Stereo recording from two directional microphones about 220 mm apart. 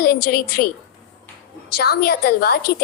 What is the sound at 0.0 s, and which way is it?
Speech, 45° left (ahead or behind).